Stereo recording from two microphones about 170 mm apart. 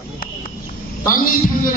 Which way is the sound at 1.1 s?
55° left (ahead or behind).